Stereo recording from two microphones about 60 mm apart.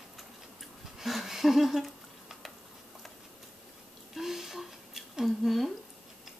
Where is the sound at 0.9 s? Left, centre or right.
Centre.